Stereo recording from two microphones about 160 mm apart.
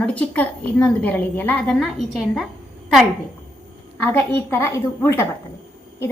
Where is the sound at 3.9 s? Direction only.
15° left (ahead or behind).